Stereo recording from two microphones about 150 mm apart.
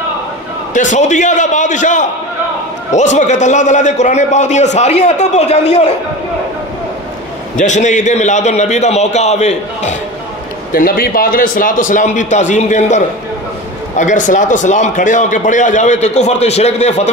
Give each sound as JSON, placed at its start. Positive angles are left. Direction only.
{"t": 0.7, "sound": "a man's voice", "side_deg": 55}
{"t": 7.5, "sound": "a man's voice", "side_deg": 55}
{"t": 10.7, "sound": "a man's voice", "side_deg": 75}